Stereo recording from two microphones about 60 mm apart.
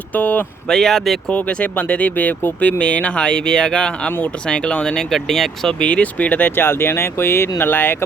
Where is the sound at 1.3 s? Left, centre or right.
Centre.